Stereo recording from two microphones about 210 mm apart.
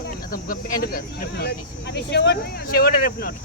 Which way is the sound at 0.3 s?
45° left (ahead or behind).